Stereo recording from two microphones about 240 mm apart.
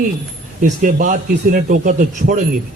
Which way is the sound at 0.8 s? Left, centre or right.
Right.